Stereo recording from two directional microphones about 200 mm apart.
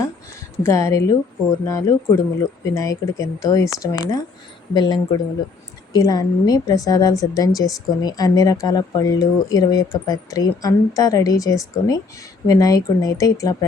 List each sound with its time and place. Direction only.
0.6 s a woman's voice: 15° left (ahead or behind)